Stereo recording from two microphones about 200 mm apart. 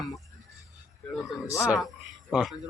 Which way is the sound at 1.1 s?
Centre (ahead or behind).